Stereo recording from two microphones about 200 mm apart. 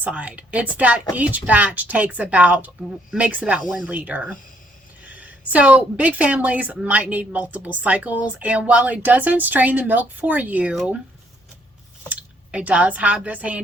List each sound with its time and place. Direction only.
0.0 s a woman's voice: 5° right (ahead or behind)
12.0 s speech: 5° right (ahead or behind)